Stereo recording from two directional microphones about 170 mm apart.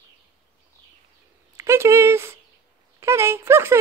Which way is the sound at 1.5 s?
15° right (ahead or behind).